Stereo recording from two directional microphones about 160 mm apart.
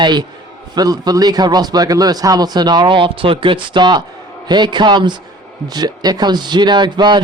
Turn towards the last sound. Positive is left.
turn(degrees=-30)  # may be behind; listen again after turning